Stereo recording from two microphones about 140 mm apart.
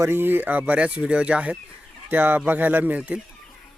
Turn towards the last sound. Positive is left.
turn(degrees=-10)  # may be behind; listen again after turning